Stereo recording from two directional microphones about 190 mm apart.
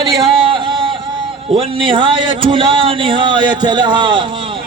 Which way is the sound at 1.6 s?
25° right (ahead or behind).